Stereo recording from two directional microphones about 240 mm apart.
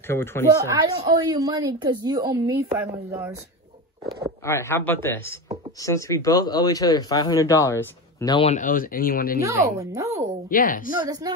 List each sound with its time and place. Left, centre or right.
0.1 s speech: centre
0.7 s a woman's voice: centre
4.5 s speech: centre; by 9.4 s left
9.4 s a woman's voice: centre
10.5 s a woman's voice: left
11.3 s speech: centre